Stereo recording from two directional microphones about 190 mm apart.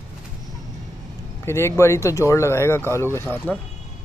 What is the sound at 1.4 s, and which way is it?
Speech, 15° left (ahead or behind).